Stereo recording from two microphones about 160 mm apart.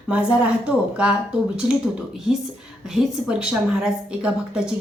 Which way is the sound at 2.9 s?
5° right (ahead or behind).